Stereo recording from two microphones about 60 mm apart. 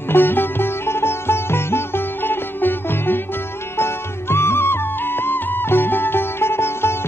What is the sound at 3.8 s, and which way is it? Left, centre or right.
Music, left.